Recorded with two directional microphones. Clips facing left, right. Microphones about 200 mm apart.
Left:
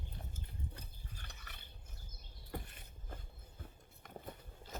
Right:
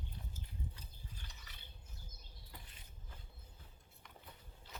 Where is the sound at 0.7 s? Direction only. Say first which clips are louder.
Left 3 dB; 65° left (ahead or behind).